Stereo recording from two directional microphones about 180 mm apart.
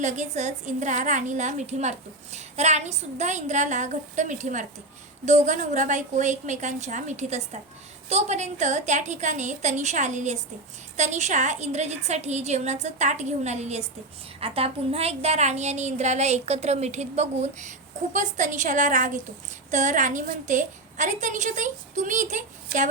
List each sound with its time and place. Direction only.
0.0 s a woman's voice: 40° right (ahead or behind)